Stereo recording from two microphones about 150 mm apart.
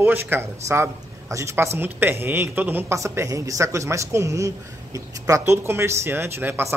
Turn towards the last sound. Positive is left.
turn(degrees=-15)  # may be behind; listen again after turning